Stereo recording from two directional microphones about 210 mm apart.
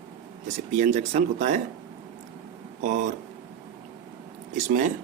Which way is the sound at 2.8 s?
35° right (ahead or behind).